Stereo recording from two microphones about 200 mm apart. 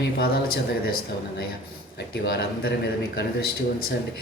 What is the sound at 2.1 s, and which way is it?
Speech, 50° left (ahead or behind).